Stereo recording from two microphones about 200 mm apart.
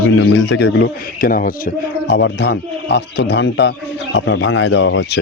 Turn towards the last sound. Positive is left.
turn(degrees=65)  # may be behind; listen again after turning